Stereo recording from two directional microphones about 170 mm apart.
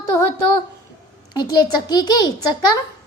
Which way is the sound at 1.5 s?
25° left (ahead or behind).